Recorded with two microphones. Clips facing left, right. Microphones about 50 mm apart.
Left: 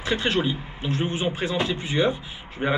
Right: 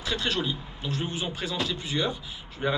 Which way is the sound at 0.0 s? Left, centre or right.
Left.